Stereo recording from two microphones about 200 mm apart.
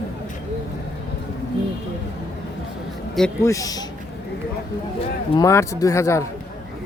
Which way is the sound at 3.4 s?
15° left (ahead or behind).